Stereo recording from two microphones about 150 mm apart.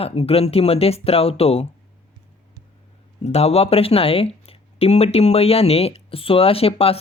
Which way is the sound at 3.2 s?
45° left (ahead or behind).